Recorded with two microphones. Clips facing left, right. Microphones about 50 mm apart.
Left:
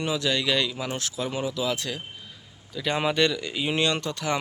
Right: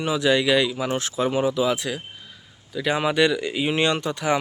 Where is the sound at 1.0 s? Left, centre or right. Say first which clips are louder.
Right 7 dB; right.